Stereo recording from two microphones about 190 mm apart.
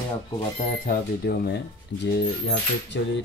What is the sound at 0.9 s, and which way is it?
Speech, 55° left (ahead or behind).